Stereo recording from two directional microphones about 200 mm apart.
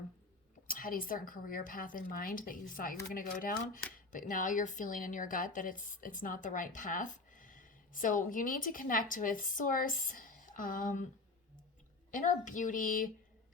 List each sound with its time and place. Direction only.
0.7 s a woman's voice: 45° left (ahead or behind)
12.1 s speech: 40° left (ahead or behind)